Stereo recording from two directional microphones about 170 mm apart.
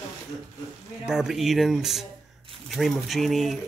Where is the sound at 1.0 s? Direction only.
5° right (ahead or behind).